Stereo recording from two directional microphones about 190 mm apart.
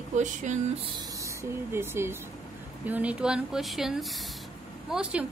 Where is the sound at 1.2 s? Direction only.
15° right (ahead or behind).